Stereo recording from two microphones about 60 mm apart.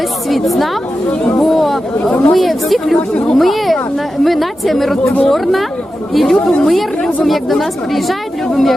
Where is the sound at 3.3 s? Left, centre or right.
Centre.